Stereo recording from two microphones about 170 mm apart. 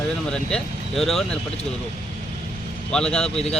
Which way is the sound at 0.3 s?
5° left (ahead or behind).